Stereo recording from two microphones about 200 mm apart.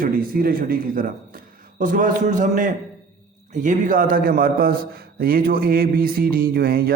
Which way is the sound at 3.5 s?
40° right (ahead or behind).